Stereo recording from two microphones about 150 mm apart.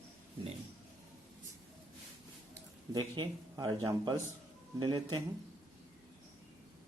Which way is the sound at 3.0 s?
30° right (ahead or behind).